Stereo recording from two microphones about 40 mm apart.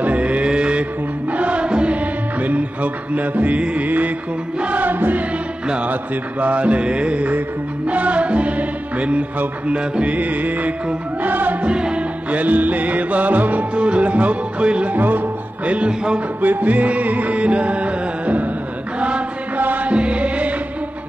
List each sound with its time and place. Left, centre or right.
0.0 s mantra: right
1.3 s music: right
2.0 s music: right
6.4 s music: right
10.1 s music: right
11.6 s music: right
12.3 s music: right
13.7 s music: right
14.9 s speech: right
16.3 s music: right
18.9 s chant: right
19.5 s music: right
19.9 s music: right